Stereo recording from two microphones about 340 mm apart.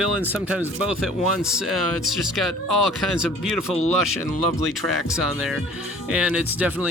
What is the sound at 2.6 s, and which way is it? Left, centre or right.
Speech, left.